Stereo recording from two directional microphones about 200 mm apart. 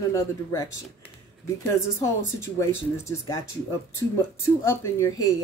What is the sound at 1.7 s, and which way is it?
Speech, 15° left (ahead or behind).